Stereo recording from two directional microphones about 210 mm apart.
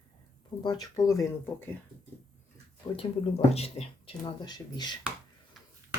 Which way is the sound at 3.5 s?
30° left (ahead or behind).